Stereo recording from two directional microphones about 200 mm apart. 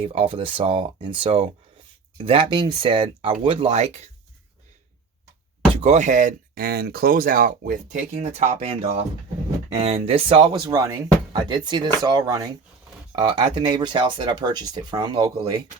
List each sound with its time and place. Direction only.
0.0 s speech: 30° right (ahead or behind)
5.8 s speech: 35° right (ahead or behind); by 15.3 s 20° right (ahead or behind)